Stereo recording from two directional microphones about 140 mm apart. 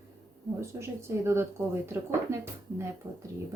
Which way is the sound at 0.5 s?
20° right (ahead or behind).